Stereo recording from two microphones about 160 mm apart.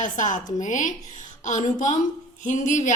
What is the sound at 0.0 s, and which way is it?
A woman's voice, 50° left (ahead or behind).